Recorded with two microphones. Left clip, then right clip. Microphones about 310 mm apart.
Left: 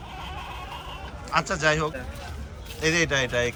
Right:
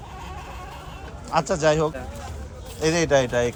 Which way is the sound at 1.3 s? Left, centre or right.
Centre.